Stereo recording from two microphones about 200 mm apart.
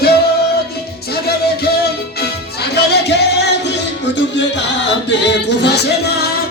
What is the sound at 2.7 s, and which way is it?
Music, 55° left (ahead or behind).